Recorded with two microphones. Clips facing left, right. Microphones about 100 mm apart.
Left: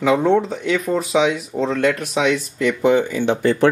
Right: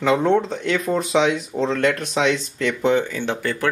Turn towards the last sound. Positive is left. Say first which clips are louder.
# left 7 dB
turn(degrees=20)  # may be behind; listen again after turning